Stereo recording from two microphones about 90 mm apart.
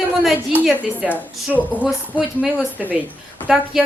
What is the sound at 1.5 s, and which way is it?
Speech, 5° right (ahead or behind).